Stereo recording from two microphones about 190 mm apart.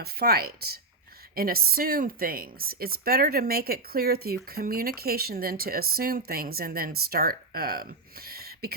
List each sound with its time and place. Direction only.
0.0 s speech: 55° right (ahead or behind)